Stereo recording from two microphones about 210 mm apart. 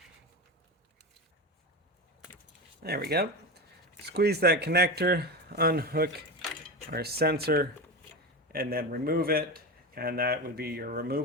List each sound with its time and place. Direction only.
2.8 s speech: 50° right (ahead or behind)